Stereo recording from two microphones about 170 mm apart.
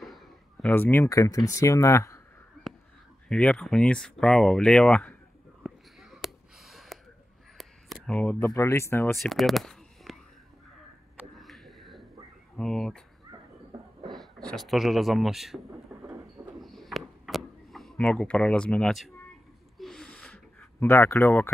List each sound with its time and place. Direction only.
0.0 s speech: centre (ahead or behind); by 2.2 s 15° left (ahead or behind)
3.3 s speech: 5° left (ahead or behind)
5.6 s a sound: centre (ahead or behind)
8.5 s speech: 15° left (ahead or behind)
9.1 s a sound: centre (ahead or behind)
14.5 s speech: centre (ahead or behind)
16.3 s a sound: centre (ahead or behind)
19.8 s snort: 5° left (ahead or behind)
20.9 s speech: 15° left (ahead or behind)